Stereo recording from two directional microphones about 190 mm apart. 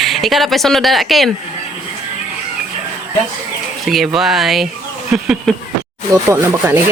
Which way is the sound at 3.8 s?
Centre (ahead or behind).